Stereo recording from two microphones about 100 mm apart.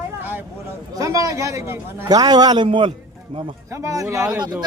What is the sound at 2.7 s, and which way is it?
Speech, 60° right (ahead or behind).